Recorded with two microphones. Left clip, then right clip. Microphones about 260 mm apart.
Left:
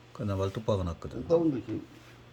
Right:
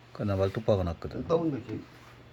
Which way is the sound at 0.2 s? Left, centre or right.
Centre.